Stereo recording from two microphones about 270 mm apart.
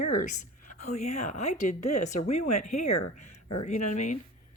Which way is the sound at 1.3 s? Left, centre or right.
Left.